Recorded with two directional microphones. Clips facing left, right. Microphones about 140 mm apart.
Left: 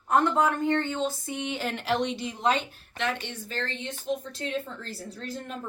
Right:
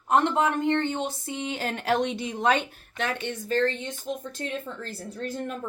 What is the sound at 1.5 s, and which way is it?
Speech, 40° right (ahead or behind).